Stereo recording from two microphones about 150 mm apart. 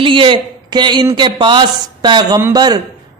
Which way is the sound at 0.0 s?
35° right (ahead or behind).